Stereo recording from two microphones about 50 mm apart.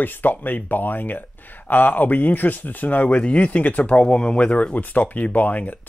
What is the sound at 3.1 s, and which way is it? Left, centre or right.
Speech, left.